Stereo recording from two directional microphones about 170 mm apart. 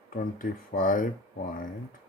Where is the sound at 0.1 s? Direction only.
55° left (ahead or behind).